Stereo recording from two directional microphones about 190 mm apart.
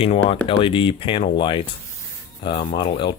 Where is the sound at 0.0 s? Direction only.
30° left (ahead or behind).